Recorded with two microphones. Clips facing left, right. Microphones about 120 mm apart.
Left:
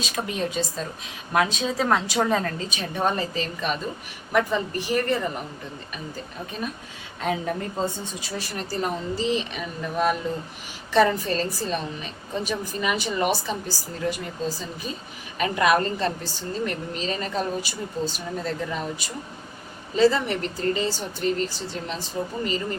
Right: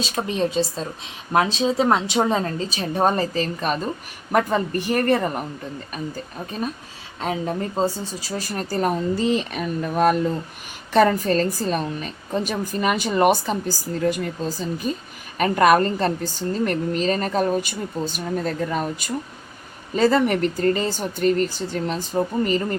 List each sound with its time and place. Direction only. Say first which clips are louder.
0.0 s a woman's voice: right 5 dB; 30° right (ahead or behind); by 5.4 s 55° right (ahead or behind)
7.2 s a woman's voice: right 2 dB; 30° right (ahead or behind); by 22.3 s 45° right (ahead or behind)